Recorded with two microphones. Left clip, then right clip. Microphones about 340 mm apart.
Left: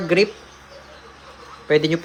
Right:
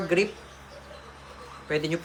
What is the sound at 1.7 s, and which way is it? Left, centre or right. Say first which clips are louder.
Speech: left 10 dB; centre.